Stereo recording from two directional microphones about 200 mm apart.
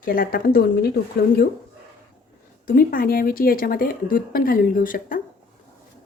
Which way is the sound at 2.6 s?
45° left (ahead or behind).